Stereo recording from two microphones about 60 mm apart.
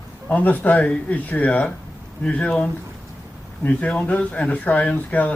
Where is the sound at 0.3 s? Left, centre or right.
Left.